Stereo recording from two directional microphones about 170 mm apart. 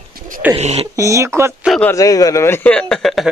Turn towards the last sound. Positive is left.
turn(degrees=0)  # may be behind; listen again after turning